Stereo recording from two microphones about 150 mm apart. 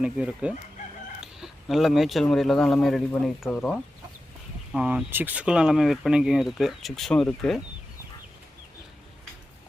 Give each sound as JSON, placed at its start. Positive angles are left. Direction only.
{"t": 0.0, "sound": "speech", "side_deg": -5}
{"t": 4.7, "sound": "speech", "side_deg": -5}